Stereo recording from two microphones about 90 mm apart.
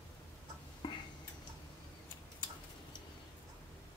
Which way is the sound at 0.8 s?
55° left (ahead or behind).